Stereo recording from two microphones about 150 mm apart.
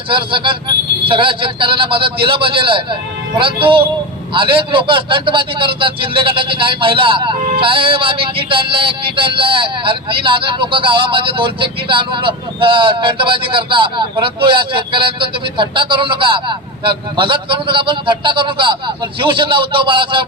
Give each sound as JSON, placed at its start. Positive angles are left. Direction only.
{"t": 0.1, "sound": "speech", "side_deg": -35}